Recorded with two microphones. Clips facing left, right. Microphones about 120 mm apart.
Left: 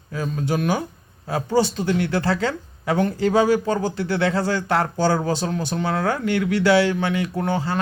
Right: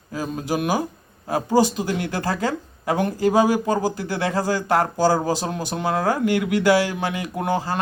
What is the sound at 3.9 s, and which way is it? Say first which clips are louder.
Speech: left 2 dB; 40° right (ahead or behind).